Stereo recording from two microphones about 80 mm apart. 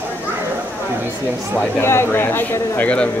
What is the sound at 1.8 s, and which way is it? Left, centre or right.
Speech, left.